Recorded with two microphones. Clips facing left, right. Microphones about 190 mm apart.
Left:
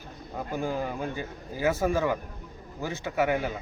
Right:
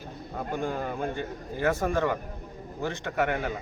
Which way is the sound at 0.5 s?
5° left (ahead or behind).